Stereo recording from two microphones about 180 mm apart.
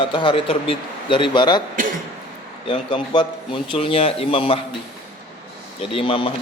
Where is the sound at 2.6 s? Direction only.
30° left (ahead or behind).